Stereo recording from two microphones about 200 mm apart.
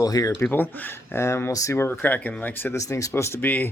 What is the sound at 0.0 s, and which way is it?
Speech, 20° left (ahead or behind).